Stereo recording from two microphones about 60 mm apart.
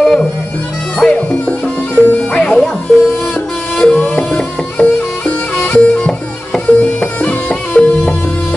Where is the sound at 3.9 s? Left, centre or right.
Left.